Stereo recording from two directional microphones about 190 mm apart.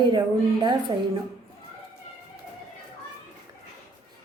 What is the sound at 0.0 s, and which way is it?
Speech, 25° right (ahead or behind).